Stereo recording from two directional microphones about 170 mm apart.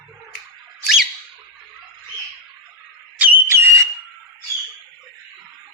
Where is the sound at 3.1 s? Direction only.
10° right (ahead or behind).